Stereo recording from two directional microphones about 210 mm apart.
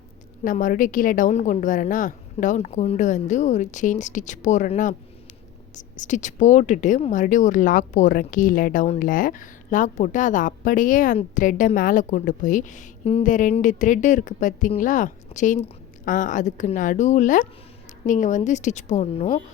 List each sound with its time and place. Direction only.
0.4 s a woman's voice: 40° left (ahead or behind)